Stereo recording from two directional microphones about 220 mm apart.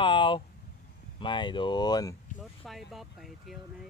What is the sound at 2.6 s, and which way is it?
Speech, centre (ahead or behind).